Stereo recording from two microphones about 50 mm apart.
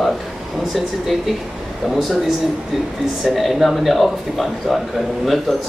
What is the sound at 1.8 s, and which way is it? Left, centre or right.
Speech, centre.